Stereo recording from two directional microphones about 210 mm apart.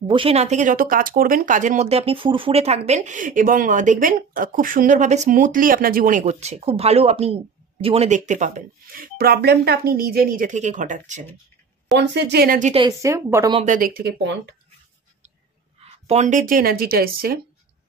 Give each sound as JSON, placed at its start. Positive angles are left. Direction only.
{"t": 0.1, "sound": "speech", "side_deg": -25}
{"t": 11.9, "sound": "speech", "side_deg": -55}
{"t": 12.7, "sound": "a woman's voice", "side_deg": -20}
{"t": 13.6, "sound": "speech", "side_deg": -40}
{"t": 15.8, "sound": "speech", "side_deg": -30}